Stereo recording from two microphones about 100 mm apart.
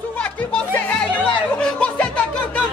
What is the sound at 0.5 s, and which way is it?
Music, 10° left (ahead or behind).